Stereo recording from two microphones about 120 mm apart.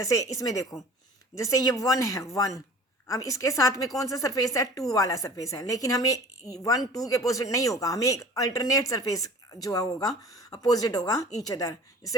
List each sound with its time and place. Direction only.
0.0 s speech: 30° left (ahead or behind)